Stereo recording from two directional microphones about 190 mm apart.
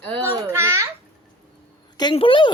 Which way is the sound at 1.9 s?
25° left (ahead or behind).